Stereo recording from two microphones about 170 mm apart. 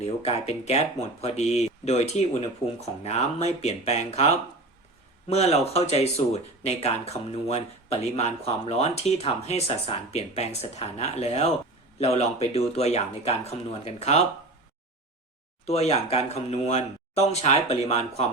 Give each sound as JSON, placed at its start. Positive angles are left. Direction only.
{"t": 0.0, "sound": "speech", "side_deg": 40}
{"t": 5.3, "sound": "speech", "side_deg": 40}
{"t": 15.6, "sound": "speech", "side_deg": 40}